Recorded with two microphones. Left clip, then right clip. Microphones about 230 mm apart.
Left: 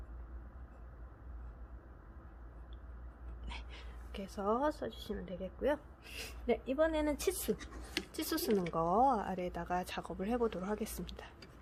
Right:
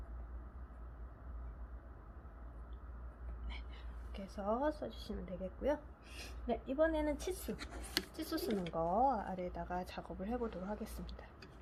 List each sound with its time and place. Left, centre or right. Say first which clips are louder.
3.5 s speech: left 5 dB; left